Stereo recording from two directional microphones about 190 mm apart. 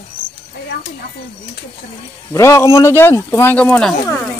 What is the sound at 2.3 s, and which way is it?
Speech, 15° left (ahead or behind).